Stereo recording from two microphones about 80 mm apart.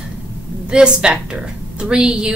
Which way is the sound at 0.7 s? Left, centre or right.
Centre.